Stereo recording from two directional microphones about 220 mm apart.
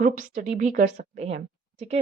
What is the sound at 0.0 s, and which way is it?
A woman's voice, 35° right (ahead or behind).